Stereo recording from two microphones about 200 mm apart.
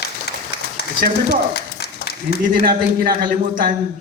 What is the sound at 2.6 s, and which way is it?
A man's voice, 50° right (ahead or behind).